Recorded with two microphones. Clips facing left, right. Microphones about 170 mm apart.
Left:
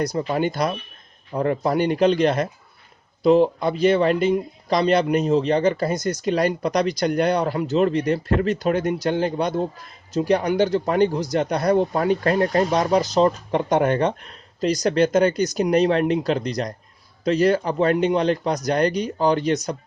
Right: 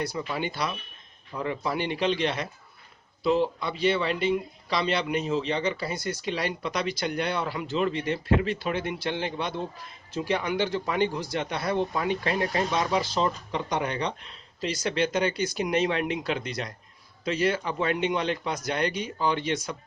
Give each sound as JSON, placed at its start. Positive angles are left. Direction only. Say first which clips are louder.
{"t": 0.0, "sound": "a man's voice", "louder": "left 8 dB", "side_deg": 40}